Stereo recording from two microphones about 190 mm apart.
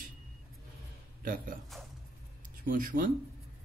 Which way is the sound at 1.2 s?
45° right (ahead or behind).